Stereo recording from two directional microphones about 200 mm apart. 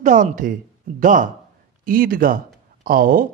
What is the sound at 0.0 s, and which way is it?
Speech, 40° right (ahead or behind).